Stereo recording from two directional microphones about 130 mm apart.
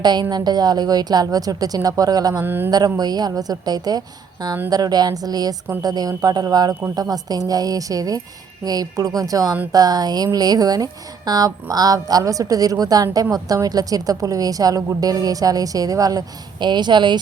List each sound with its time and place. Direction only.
0.0 s a woman's voice: 35° right (ahead or behind)
2.4 s speech: 15° right (ahead or behind)
2.6 s a woman's voice: 30° right (ahead or behind)